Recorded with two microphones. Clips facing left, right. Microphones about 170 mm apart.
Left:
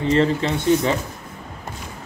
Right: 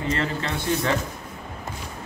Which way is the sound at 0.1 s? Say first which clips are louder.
Left 10 dB; 25° left (ahead or behind).